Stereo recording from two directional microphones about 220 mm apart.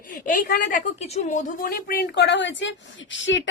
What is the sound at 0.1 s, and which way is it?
A woman's voice, 40° left (ahead or behind).